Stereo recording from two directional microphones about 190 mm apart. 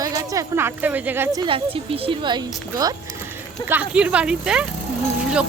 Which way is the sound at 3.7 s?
5° right (ahead or behind).